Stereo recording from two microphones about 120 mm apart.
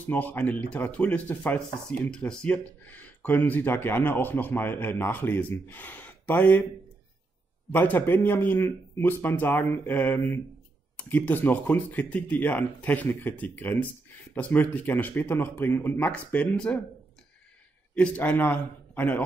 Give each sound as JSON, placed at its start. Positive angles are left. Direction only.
{"t": 0.0, "sound": "speech", "side_deg": 15}
{"t": 7.7, "sound": "speech", "side_deg": 15}
{"t": 17.9, "sound": "speech", "side_deg": 10}